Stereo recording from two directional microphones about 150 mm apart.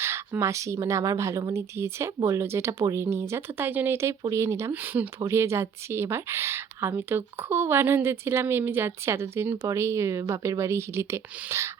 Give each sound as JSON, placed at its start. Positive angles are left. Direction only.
{"t": 0.0, "sound": "speech", "side_deg": -15}